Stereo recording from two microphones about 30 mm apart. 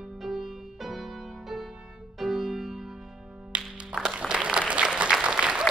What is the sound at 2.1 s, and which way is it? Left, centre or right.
Music, centre.